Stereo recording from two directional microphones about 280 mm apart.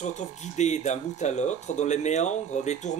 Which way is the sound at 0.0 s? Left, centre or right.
Left.